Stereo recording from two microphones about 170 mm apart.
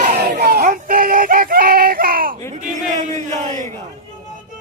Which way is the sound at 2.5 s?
45° right (ahead or behind).